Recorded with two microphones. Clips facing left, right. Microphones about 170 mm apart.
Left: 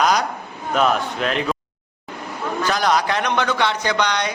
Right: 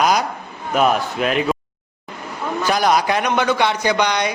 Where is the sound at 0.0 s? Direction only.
10° right (ahead or behind).